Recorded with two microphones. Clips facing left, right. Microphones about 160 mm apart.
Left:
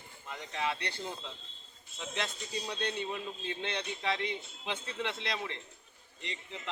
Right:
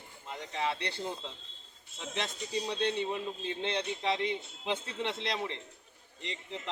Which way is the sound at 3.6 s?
30° right (ahead or behind).